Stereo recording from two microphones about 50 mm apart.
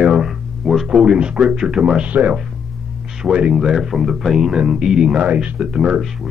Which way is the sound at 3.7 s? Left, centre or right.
Centre.